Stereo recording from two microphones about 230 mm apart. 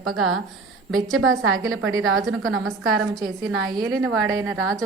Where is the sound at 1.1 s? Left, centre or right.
Right.